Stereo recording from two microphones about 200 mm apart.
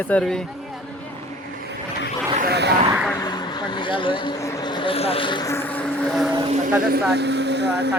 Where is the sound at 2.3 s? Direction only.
50° right (ahead or behind).